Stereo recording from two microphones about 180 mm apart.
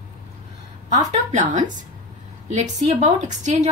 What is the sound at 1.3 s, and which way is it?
A woman's voice, 40° right (ahead or behind).